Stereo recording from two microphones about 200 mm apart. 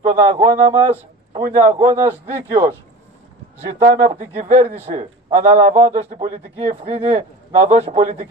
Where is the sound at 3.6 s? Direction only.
30° right (ahead or behind).